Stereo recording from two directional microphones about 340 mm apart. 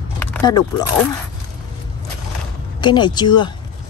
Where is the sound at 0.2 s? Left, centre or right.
Centre.